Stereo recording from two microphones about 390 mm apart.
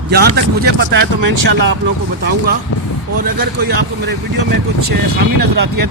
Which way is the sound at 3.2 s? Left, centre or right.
Right.